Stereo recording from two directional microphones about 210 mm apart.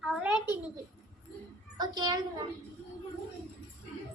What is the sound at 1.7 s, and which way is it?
Speech, 20° right (ahead or behind).